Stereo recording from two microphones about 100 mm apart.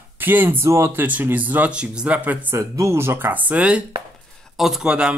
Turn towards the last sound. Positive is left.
turn(degrees=-5)  # may be behind; listen again after turning